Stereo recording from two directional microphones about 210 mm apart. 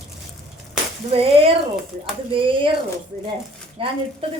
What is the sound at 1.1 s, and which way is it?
A woman's voice, 25° right (ahead or behind).